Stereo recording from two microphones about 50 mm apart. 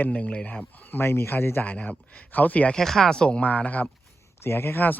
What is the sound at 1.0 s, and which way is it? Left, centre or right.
Speech, left.